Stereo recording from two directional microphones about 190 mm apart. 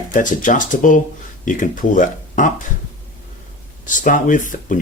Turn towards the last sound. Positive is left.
turn(degrees=45)  # may be behind; listen again after turning